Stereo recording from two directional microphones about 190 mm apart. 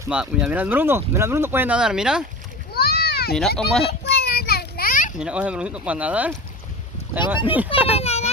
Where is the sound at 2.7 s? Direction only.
55° left (ahead or behind).